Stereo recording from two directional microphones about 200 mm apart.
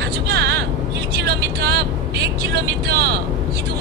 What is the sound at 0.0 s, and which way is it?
Vehicle, 55° right (ahead or behind).